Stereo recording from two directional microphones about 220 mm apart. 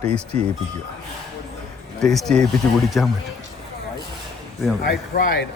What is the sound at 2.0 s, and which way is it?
Speech, centre (ahead or behind).